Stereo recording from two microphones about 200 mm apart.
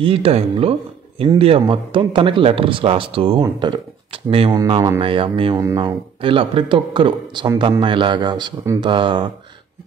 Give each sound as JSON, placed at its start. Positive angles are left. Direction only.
{"t": 0.0, "sound": "speech", "side_deg": -30}